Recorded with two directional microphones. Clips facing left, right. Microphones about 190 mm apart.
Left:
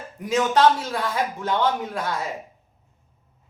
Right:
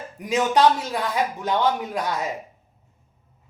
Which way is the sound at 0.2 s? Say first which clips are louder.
Even; 15° right (ahead or behind).